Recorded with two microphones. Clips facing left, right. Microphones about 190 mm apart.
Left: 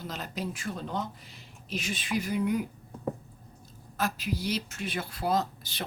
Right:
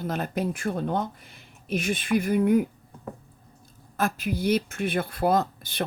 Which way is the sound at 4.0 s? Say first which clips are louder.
Right 5 dB; 50° right (ahead or behind).